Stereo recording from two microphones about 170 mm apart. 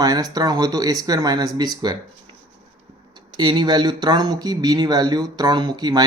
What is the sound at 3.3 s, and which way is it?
Speech, 25° right (ahead or behind).